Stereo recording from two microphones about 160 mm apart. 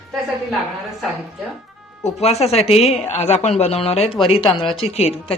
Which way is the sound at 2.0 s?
40° left (ahead or behind).